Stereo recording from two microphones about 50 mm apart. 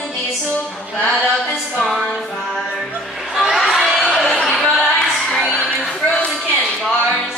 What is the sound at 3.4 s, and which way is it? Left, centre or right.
Crowd, centre.